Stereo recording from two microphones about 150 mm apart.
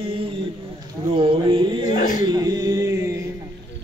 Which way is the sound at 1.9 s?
60° left (ahead or behind).